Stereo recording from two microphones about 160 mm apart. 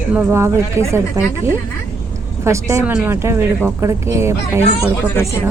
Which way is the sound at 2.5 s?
15° right (ahead or behind).